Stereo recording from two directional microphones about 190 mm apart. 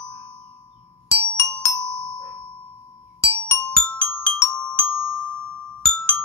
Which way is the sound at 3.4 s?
10° left (ahead or behind).